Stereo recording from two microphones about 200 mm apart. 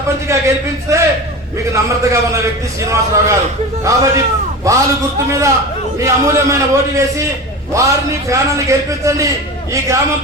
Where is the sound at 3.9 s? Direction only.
15° right (ahead or behind).